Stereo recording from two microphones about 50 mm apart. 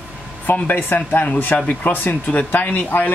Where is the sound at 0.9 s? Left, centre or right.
Left.